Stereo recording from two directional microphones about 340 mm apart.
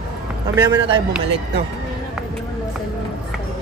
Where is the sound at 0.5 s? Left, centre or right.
Centre.